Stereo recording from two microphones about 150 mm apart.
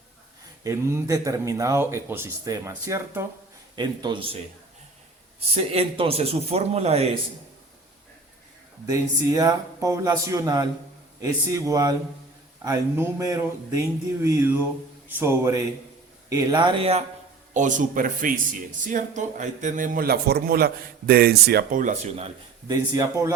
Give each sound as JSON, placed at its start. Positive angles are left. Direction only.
{"t": 0.6, "sound": "speech", "side_deg": -20}
{"t": 3.8, "sound": "speech", "side_deg": -30}
{"t": 5.7, "sound": "a man's voice", "side_deg": -40}
{"t": 8.9, "sound": "speech", "side_deg": -25}
{"t": 17.5, "sound": "a man's voice", "side_deg": -55}
{"t": 22.7, "sound": "speech", "side_deg": -20}